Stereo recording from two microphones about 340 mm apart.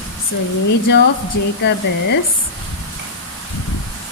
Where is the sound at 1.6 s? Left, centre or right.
Left.